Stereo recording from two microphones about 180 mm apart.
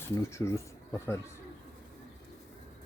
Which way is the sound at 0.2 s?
15° left (ahead or behind).